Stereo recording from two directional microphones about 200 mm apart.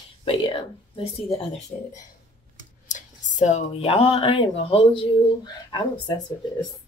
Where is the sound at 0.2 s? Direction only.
25° left (ahead or behind).